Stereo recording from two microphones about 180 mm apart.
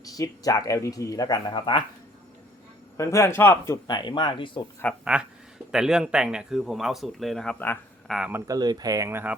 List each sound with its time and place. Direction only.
0.0 s speech: 20° left (ahead or behind)
3.0 s a man's voice: 15° left (ahead or behind)
3.8 s speech: 25° left (ahead or behind)
4.8 s a man's voice: 10° left (ahead or behind)
5.7 s speech: 5° right (ahead or behind)
8.1 s speech: 10° right (ahead or behind)